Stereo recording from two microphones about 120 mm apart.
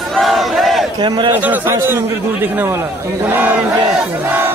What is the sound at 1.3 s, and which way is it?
A man's voice, 15° right (ahead or behind).